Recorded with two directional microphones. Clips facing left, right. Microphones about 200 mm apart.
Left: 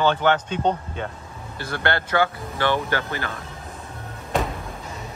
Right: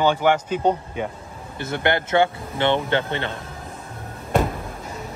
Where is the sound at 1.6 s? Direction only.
20° right (ahead or behind).